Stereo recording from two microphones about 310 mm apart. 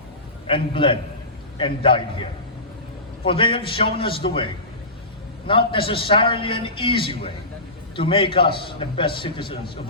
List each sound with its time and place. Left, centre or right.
0.4 s a man's voice: centre
3.2 s a man's voice: centre